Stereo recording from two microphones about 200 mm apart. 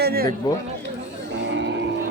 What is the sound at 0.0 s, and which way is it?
Speech, 50° right (ahead or behind).